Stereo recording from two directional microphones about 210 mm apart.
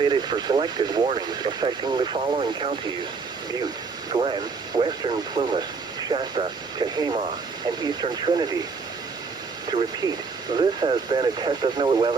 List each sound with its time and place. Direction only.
0.0 s speech: 20° right (ahead or behind)
4.1 s speech: 25° right (ahead or behind)
10.6 s speech: 20° right (ahead or behind)